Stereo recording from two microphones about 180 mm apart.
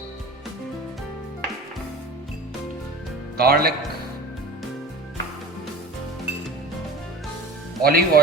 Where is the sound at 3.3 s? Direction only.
60° right (ahead or behind).